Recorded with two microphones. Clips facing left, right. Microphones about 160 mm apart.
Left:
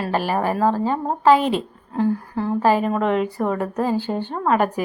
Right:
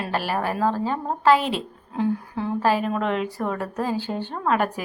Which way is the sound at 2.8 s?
5° left (ahead or behind).